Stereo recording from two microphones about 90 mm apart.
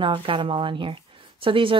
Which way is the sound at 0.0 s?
70° right (ahead or behind).